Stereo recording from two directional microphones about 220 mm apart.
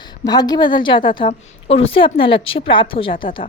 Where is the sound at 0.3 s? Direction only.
20° left (ahead or behind).